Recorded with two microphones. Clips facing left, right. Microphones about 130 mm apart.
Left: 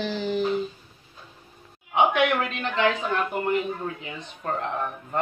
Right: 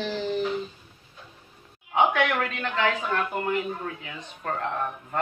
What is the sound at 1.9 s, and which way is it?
Speech, 20° left (ahead or behind).